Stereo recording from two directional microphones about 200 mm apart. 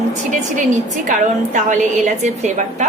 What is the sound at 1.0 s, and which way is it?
A woman's voice, 40° right (ahead or behind).